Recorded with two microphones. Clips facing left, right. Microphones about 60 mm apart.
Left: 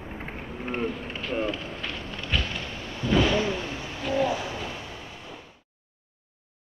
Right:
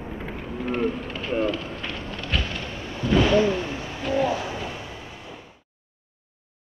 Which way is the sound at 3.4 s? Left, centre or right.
Right.